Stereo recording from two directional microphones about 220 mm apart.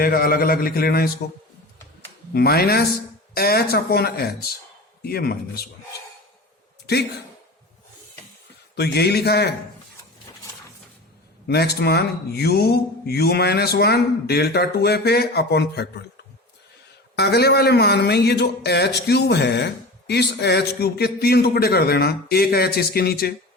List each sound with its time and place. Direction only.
0.0 s a man's voice: 40° left (ahead or behind)
2.3 s a man's voice: 45° left (ahead or behind)
6.8 s a man's voice: 45° left (ahead or behind)
8.7 s a man's voice: 50° left (ahead or behind)
11.4 s a man's voice: 45° left (ahead or behind)
17.2 s a man's voice: 45° left (ahead or behind)